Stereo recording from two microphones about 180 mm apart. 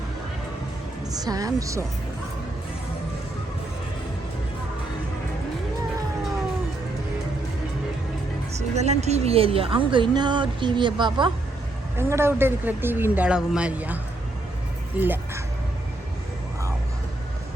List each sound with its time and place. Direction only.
1.2 s a woman's voice: 20° right (ahead or behind)
8.7 s a woman's voice: 40° right (ahead or behind)
11.9 s speech: 15° right (ahead or behind)